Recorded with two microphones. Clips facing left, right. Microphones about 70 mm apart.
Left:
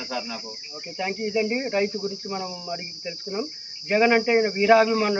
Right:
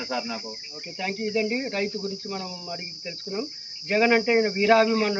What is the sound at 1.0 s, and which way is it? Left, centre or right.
Speech, centre.